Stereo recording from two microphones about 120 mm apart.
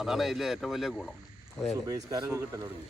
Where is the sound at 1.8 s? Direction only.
30° right (ahead or behind).